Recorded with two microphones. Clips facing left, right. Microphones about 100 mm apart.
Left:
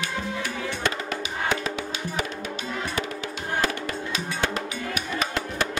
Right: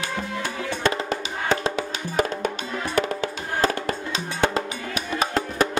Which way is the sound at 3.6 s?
35° right (ahead or behind).